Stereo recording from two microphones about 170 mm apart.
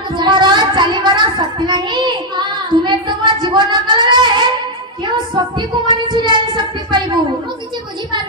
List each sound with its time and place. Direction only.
0.1 s child singing: 25° right (ahead or behind)